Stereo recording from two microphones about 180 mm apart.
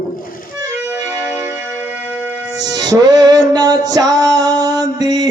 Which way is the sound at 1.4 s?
15° right (ahead or behind).